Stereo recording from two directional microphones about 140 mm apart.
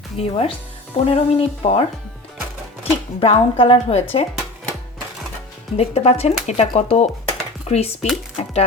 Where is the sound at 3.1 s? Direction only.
40° left (ahead or behind).